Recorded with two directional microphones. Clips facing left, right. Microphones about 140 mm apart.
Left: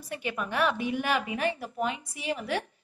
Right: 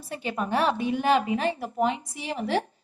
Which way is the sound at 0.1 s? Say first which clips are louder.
Right 5 dB; 30° right (ahead or behind).